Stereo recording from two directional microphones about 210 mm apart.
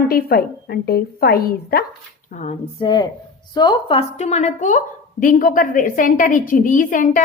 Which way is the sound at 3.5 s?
20° left (ahead or behind).